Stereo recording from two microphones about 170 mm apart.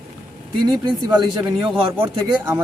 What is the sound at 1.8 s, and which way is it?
Speech, 30° right (ahead or behind).